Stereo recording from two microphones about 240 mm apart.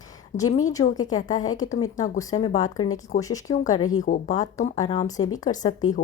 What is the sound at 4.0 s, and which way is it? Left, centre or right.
Speech, left.